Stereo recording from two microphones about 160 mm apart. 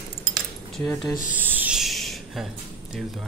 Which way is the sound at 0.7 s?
Centre (ahead or behind).